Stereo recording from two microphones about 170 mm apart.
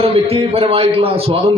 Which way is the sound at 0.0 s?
35° right (ahead or behind).